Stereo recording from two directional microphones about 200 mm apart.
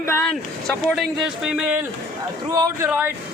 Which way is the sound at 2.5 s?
15° right (ahead or behind).